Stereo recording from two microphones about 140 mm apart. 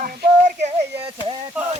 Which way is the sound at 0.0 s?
65° right (ahead or behind).